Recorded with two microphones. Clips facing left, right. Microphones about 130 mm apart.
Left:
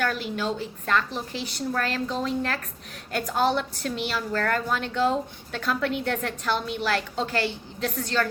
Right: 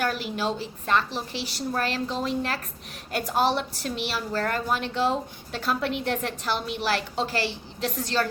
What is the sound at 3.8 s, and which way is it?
A woman's voice, 15° right (ahead or behind).